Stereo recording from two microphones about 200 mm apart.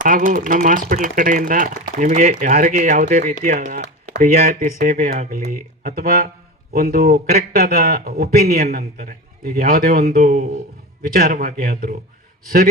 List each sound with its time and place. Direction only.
0.0 s speech: 45° right (ahead or behind)
5.8 s speech: 50° right (ahead or behind)
10.2 s speech: 35° right (ahead or behind)
11.2 s speech: 45° right (ahead or behind)